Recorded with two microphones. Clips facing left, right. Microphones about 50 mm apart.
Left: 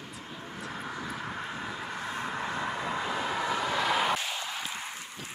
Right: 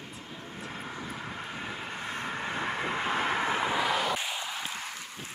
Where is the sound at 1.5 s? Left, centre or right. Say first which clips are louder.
Left 1 dB; right.